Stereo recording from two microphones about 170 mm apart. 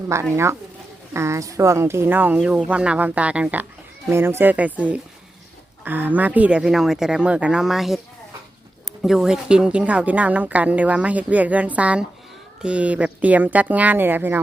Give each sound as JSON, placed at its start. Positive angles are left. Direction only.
{"t": 0.1, "sound": "speech", "side_deg": -15}
{"t": 5.8, "sound": "speech", "side_deg": -10}